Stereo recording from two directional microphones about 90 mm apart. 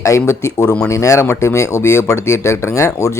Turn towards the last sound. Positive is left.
turn(degrees=35)  # may be behind; listen again after turning